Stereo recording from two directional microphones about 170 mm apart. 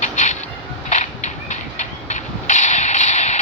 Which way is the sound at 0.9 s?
45° left (ahead or behind).